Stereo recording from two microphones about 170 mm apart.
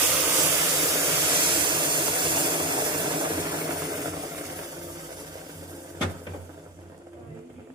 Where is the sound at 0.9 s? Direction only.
30° right (ahead or behind).